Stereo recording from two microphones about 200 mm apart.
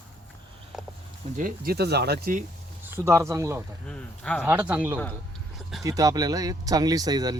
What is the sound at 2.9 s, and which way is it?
Speech, 15° right (ahead or behind).